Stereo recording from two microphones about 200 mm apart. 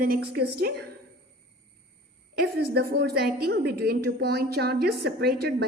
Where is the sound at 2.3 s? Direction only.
50° right (ahead or behind).